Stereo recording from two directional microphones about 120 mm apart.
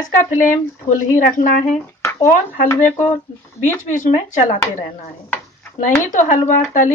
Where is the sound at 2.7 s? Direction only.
15° left (ahead or behind).